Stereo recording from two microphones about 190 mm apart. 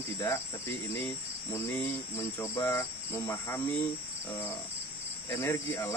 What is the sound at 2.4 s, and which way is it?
Cricket, 15° left (ahead or behind).